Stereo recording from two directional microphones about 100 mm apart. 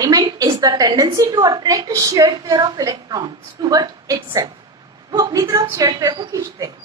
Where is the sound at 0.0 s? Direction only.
40° right (ahead or behind).